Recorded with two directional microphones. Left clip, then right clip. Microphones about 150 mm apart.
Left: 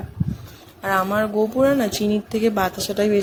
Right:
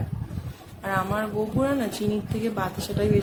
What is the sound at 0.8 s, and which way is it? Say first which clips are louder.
Speech: left 6 dB; 45° left (ahead or behind).